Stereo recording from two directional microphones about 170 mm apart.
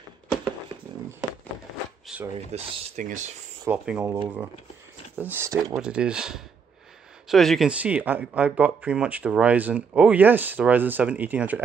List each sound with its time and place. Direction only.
2.3 s speech: 45° right (ahead or behind)
3.6 s speech: 5° right (ahead or behind)
5.8 s speech: 5° right (ahead or behind)